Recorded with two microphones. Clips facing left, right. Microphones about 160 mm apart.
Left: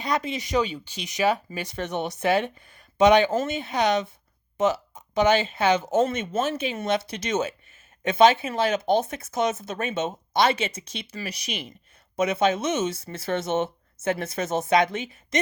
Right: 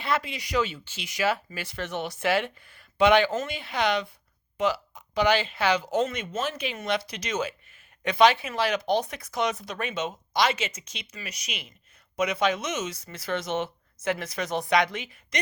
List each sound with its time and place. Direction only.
0.0 s speech: 20° left (ahead or behind)
14.6 s a woman's voice: 25° left (ahead or behind)